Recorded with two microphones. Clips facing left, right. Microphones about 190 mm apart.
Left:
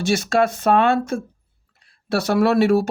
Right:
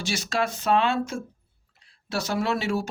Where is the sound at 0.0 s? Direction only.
55° left (ahead or behind).